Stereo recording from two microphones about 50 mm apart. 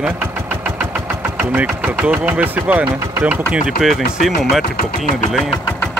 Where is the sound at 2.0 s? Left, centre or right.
Right.